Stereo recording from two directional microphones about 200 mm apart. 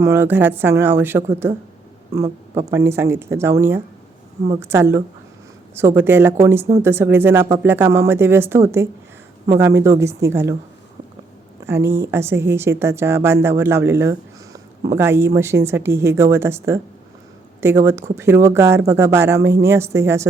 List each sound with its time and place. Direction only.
0.0 s a woman's voice: 10° right (ahead or behind)
11.6 s a woman's voice: 10° right (ahead or behind)